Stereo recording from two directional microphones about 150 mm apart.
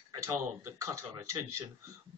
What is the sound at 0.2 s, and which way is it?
Speech, 20° right (ahead or behind).